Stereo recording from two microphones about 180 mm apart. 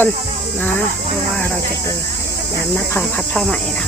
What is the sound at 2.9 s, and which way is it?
Speech, 5° left (ahead or behind).